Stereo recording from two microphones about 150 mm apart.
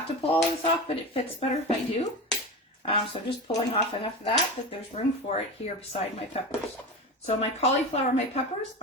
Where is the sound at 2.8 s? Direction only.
35° left (ahead or behind).